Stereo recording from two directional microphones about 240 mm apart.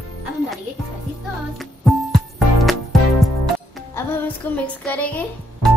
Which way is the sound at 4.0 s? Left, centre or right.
Centre.